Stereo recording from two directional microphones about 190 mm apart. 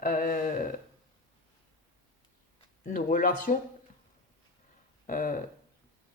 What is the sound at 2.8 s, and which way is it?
Speech, 45° left (ahead or behind).